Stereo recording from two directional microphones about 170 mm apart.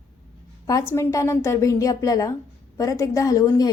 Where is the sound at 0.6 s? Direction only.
15° left (ahead or behind).